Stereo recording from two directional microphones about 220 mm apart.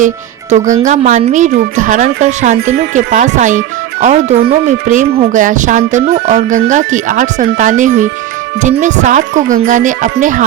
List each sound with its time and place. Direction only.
0.5 s speech: 35° right (ahead or behind)